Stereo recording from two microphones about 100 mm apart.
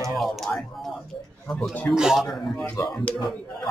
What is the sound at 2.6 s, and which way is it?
Speech, 15° left (ahead or behind).